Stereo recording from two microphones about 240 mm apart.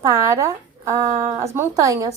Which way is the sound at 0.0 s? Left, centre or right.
Centre.